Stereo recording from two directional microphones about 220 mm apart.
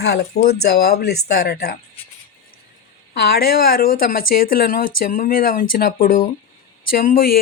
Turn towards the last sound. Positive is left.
turn(degrees=40)  # may be behind; listen again after turning